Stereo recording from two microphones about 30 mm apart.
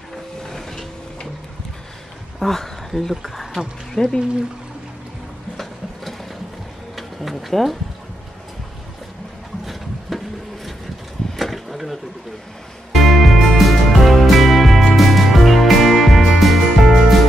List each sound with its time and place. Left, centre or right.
0.4 s printer: centre
2.4 s speech: centre
3.2 s speech: centre
3.9 s speech: centre
7.0 s speech: centre
9.7 s a sound: centre
12.9 s music: centre